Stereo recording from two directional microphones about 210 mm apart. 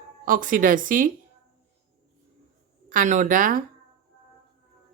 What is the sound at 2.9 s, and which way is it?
Speech, 40° right (ahead or behind).